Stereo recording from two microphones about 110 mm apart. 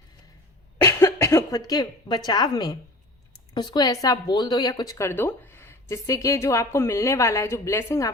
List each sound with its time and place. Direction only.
0.9 s a woman's voice: 25° left (ahead or behind)